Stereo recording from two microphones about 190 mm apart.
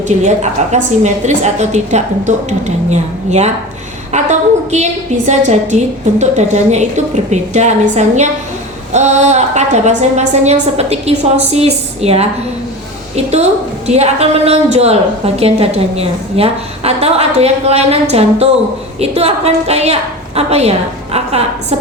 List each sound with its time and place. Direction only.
0.1 s a woman's voice: 40° right (ahead or behind)